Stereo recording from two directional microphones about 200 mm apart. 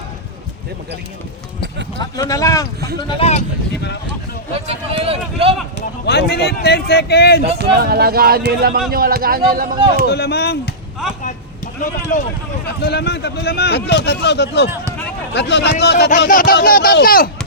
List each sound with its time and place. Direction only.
2.0 s speech: 20° left (ahead or behind)
4.5 s speech: 30° right (ahead or behind)
6.3 s speech: 55° left (ahead or behind)
7.6 s speech: 50° right (ahead or behind)
10.1 s speech: 55° left (ahead or behind)
12.1 s speech: 40° left (ahead or behind)
12.8 s speech: 55° left (ahead or behind)
16.2 s speech: 45° left (ahead or behind)